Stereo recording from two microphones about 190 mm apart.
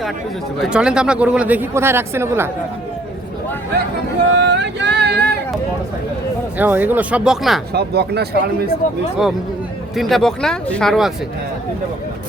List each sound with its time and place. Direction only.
0.6 s speech: 5° right (ahead or behind)
4.4 s a sound: 65° right (ahead or behind)
6.6 s speech: 10° right (ahead or behind)
7.7 s speech: 60° right (ahead or behind)
8.8 s speech: 40° left (ahead or behind)
9.9 s speech: centre (ahead or behind)